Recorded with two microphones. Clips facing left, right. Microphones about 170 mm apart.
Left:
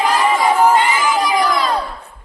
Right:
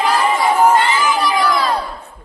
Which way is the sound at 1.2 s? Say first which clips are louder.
Even; 15° left (ahead or behind).